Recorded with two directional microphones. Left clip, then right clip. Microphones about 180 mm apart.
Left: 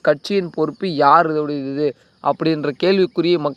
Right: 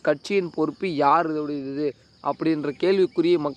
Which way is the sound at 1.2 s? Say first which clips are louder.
Left 7 dB; 50° left (ahead or behind).